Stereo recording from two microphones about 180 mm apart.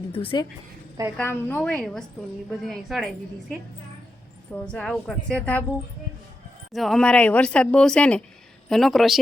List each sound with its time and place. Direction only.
0.1 s speech: 30° left (ahead or behind)
1.1 s a woman's voice: 10° left (ahead or behind)
4.5 s a woman's voice: 5° left (ahead or behind)
6.7 s a woman's voice: centre (ahead or behind)